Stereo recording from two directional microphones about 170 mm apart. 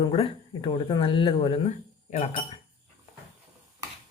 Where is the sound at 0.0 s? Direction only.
30° left (ahead or behind).